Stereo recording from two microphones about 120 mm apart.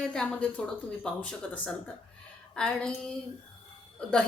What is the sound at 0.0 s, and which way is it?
Speech, 5° left (ahead or behind).